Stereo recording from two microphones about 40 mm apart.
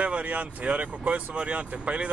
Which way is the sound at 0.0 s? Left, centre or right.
Right.